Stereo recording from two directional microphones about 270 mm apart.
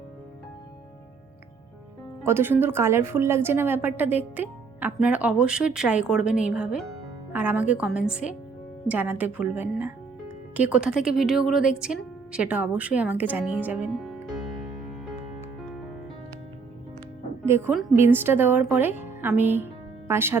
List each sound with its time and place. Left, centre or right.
2.2 s a woman's voice: centre
17.4 s a woman's voice: centre